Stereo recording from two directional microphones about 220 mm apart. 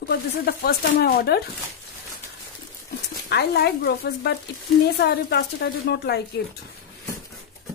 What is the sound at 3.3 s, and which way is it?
Speech, 50° left (ahead or behind).